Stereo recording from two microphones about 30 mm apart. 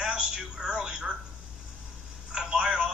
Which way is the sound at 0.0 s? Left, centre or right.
Right.